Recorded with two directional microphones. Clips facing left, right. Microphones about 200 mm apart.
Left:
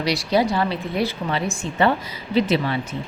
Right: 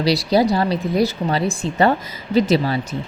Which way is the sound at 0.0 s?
35° right (ahead or behind).